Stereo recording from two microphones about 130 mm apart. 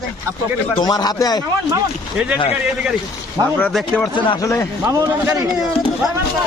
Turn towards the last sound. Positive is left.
turn(degrees=-25)  # may be behind; listen again after turning